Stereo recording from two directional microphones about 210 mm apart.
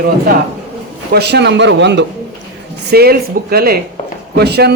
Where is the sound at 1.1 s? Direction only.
50° right (ahead or behind).